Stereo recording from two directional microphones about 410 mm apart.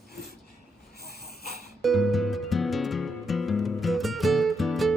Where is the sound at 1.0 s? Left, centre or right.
Left.